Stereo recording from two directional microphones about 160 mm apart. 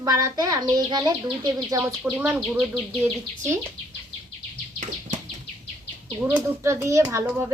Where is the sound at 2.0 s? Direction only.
5° right (ahead or behind).